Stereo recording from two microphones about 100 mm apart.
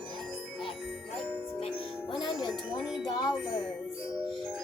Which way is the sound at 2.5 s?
5° left (ahead or behind).